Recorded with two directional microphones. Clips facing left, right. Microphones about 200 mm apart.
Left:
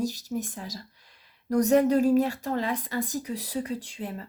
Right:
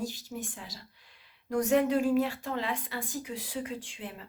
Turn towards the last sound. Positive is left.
turn(degrees=40)  # may be behind; listen again after turning